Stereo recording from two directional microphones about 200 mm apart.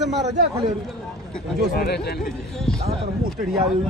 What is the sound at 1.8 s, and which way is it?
Speech, 50° left (ahead or behind).